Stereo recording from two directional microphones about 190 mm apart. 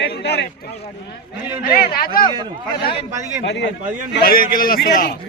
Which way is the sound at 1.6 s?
50° left (ahead or behind).